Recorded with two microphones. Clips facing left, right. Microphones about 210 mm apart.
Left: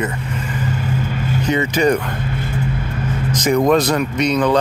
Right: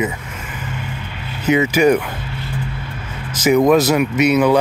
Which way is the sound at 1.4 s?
5° right (ahead or behind).